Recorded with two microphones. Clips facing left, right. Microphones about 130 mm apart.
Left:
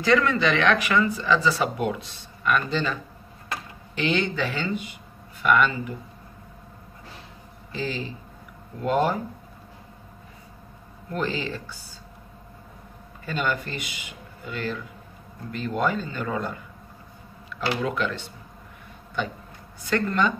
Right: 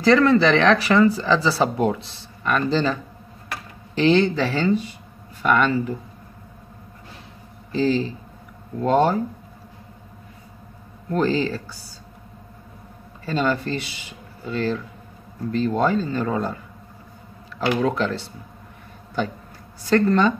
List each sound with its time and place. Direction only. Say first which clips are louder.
0.0 s speech: right 6 dB; 35° right (ahead or behind)
7.7 s speech: right 10 dB; 35° right (ahead or behind)
11.1 s speech: right 7 dB; 35° right (ahead or behind)
13.2 s speech: right 5 dB; 35° right (ahead or behind)
19.8 s speech: right 6 dB; 35° right (ahead or behind)